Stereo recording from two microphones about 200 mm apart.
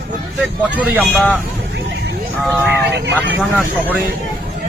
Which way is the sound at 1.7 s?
55° right (ahead or behind).